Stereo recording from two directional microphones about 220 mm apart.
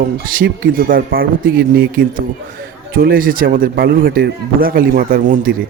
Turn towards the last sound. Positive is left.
turn(degrees=-40)  # may be behind; listen again after turning